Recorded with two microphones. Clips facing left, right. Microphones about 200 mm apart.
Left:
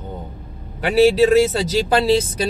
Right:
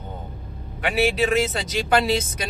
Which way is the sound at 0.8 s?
35° left (ahead or behind).